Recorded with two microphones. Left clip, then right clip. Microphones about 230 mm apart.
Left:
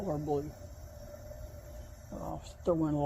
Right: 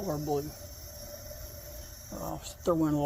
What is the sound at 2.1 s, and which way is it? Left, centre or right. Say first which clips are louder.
Speech: right 3 dB; right.